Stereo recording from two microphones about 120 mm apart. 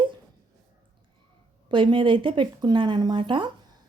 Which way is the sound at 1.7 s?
45° right (ahead or behind).